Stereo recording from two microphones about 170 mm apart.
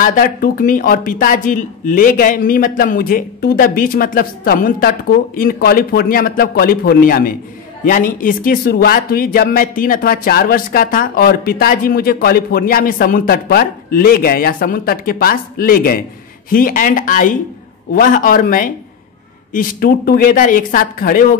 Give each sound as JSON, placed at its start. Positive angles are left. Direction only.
{"t": 0.0, "sound": "speech", "side_deg": 55}